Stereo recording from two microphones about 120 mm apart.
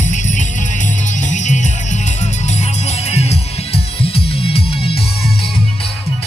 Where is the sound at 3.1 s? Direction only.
60° left (ahead or behind).